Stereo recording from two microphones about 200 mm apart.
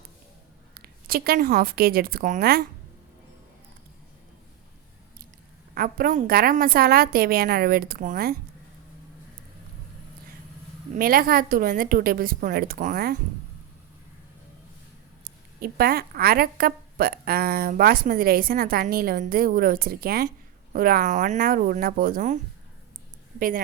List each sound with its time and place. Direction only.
0.7 s a woman's voice: 50° right (ahead or behind)
5.7 s a woman's voice: 45° right (ahead or behind)
10.9 s a woman's voice: 45° right (ahead or behind)
15.2 s a woman's voice: 50° right (ahead or behind)